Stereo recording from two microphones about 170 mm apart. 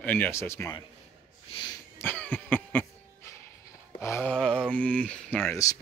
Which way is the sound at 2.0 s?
10° left (ahead or behind).